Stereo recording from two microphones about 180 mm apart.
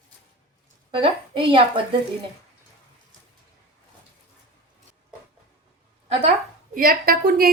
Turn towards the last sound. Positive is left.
turn(degrees=-55)  # may be behind; listen again after turning